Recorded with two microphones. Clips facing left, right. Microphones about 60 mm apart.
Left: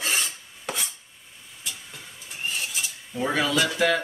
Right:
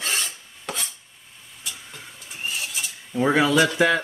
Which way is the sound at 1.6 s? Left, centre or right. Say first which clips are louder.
Right 1 dB; centre.